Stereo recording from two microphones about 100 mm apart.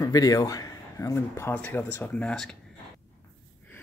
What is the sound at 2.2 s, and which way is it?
Speech, 5° left (ahead or behind).